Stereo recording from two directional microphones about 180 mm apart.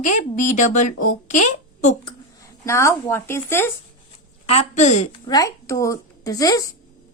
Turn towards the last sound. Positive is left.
turn(degrees=20)  # may be behind; listen again after turning